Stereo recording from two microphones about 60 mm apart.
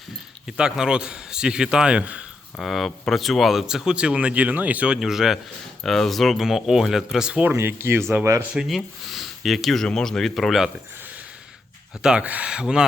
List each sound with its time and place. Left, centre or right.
0.4 s speech: centre
2.6 s speech: centre; by 4.9 s right
4.9 s speech: centre
5.8 s speech: centre
7.5 s speech: right
8.5 s speech: centre
12.0 s speech: right